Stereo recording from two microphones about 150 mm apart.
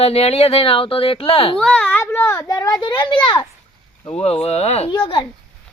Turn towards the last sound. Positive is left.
turn(degrees=35)  # may be behind; listen again after turning